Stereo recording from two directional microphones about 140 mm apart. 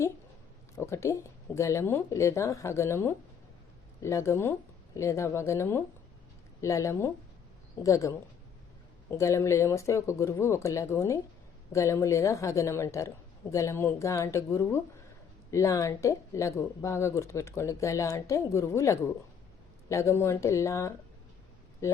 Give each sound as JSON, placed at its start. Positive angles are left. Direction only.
{"t": 0.8, "sound": "speech", "side_deg": 20}